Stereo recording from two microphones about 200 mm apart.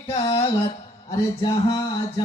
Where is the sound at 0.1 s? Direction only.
25° left (ahead or behind).